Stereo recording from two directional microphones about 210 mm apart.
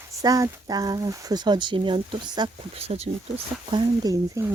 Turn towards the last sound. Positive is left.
turn(degrees=-15)  # may be behind; listen again after turning